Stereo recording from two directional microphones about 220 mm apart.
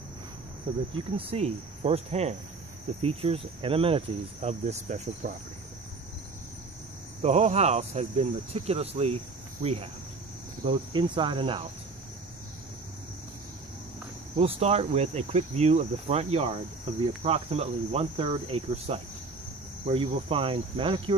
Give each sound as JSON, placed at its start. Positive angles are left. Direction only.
{"t": 0.9, "sound": "speech", "side_deg": -25}
{"t": 7.2, "sound": "speech", "side_deg": -30}
{"t": 14.3, "sound": "speech", "side_deg": -25}